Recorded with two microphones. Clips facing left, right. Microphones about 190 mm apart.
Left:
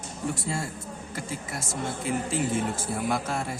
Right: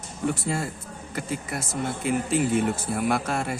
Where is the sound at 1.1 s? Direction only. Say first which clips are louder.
Right 5 dB; 60° right (ahead or behind).